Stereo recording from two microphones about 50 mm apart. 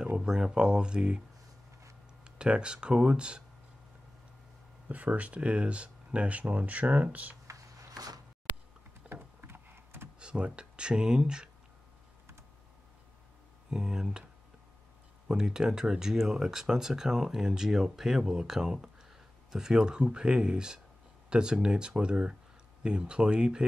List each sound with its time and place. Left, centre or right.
0.2 s speech: centre
2.2 s speech: centre
4.8 s speech: right
9.1 s a sound: right
10.1 s speech: right
13.7 s speech: centre
15.2 s speech: centre